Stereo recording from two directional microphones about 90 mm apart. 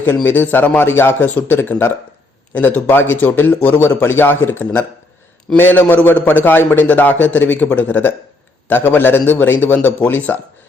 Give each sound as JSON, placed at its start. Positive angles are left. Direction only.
{"t": 0.0, "sound": "a man's voice", "side_deg": 20}